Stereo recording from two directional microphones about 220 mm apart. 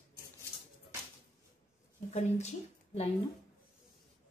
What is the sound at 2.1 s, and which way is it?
Speech, 30° left (ahead or behind).